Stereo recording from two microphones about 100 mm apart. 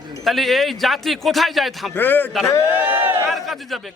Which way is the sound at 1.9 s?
20° left (ahead or behind).